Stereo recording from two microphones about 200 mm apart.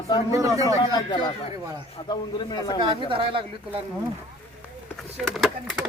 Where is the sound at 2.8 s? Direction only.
25° right (ahead or behind).